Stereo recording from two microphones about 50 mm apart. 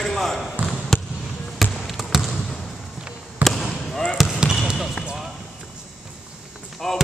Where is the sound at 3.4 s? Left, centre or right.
Centre.